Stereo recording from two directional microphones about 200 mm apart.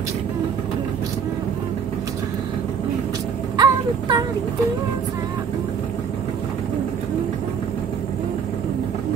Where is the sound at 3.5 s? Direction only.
20° right (ahead or behind).